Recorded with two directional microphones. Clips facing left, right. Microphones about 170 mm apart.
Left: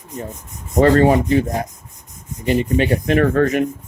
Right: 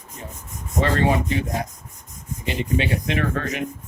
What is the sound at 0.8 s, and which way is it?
Speech, 45° left (ahead or behind).